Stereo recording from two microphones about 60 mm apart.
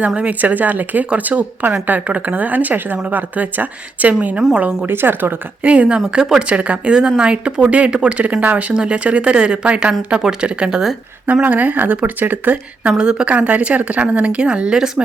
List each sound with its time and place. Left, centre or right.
0.2 s speech: right
4.9 s speech: right
5.6 s speech: right
6.1 s speech: centre
6.5 s speech: right
11.3 s speech: right
12.9 s speech: centre